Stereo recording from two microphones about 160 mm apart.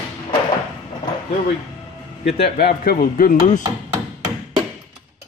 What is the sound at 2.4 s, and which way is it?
Speech, 75° left (ahead or behind).